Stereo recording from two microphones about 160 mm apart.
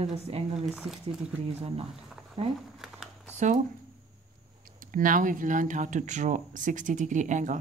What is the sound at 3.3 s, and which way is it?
Speech, 50° right (ahead or behind).